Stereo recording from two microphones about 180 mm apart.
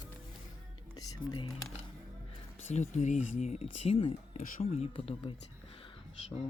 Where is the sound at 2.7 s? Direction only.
40° left (ahead or behind).